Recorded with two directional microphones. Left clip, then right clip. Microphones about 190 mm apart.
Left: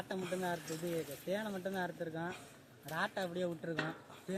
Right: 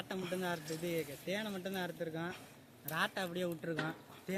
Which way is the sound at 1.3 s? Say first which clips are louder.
Left 1 dB; 65° right (ahead or behind).